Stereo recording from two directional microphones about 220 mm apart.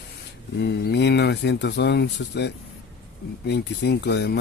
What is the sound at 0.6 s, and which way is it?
Speech, 50° left (ahead or behind).